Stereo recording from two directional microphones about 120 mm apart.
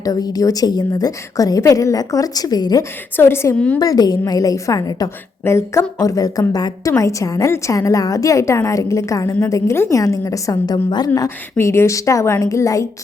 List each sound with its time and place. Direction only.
0.0 s a woman's voice: 30° left (ahead or behind)
3.2 s a woman's voice: 20° left (ahead or behind)
3.8 s a woman's voice: 35° left (ahead or behind)
11.5 s a woman's voice: 20° left (ahead or behind)